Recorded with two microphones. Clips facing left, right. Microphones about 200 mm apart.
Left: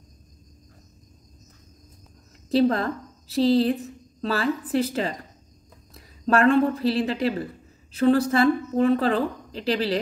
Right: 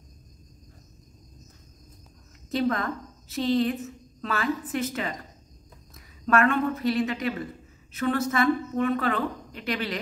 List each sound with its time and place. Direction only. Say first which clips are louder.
2.5 s a woman's voice: left 6 dB; 35° left (ahead or behind)